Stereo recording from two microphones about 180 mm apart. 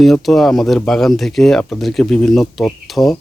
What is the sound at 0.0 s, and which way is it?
A man's voice, centre (ahead or behind).